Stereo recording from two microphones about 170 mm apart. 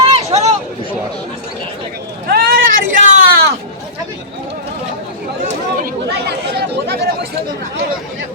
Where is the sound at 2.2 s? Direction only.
65° right (ahead or behind).